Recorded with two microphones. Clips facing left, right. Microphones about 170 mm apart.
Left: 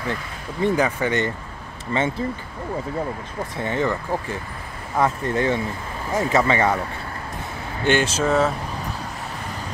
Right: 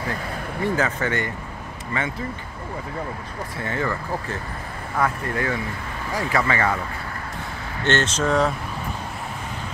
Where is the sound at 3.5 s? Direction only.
20° left (ahead or behind).